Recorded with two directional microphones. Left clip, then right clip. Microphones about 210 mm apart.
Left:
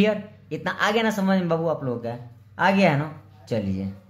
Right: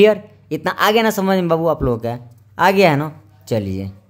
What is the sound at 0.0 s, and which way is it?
Speech, 35° right (ahead or behind).